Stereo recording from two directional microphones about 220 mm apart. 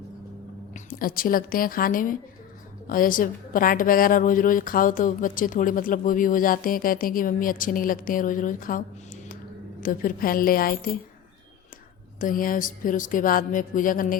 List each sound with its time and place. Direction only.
0.7 s a woman's voice: 40° left (ahead or behind)
9.8 s a woman's voice: 40° left (ahead or behind)
12.2 s a woman's voice: 40° left (ahead or behind)